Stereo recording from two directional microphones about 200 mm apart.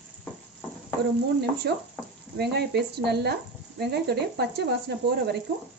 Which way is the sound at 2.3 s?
55° right (ahead or behind).